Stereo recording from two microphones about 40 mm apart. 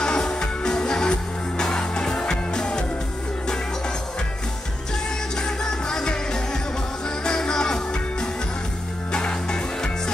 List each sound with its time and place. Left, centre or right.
0.0 s music: centre
5.4 s music: centre